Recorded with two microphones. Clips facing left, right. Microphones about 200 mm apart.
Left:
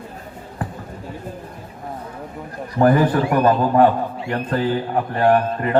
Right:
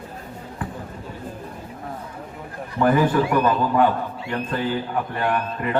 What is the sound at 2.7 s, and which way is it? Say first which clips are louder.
A man's voice: left 3 dB; 40° left (ahead or behind).